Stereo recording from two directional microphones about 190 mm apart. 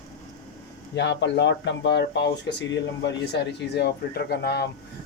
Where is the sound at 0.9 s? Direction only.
65° left (ahead or behind).